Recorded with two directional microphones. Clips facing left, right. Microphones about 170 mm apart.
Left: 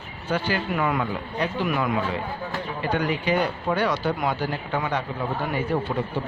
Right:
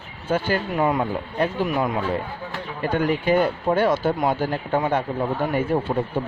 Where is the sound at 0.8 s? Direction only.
35° right (ahead or behind).